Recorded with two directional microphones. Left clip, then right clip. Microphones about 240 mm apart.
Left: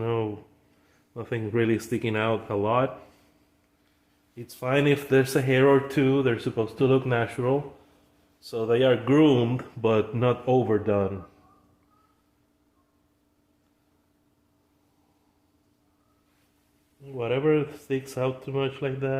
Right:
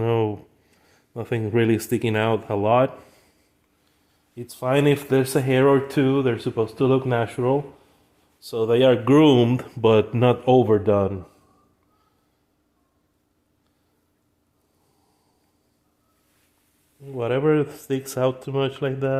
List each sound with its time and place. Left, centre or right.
0.0 s a sound: right
0.9 s speech: right
4.4 s speech: right
17.1 s speech: right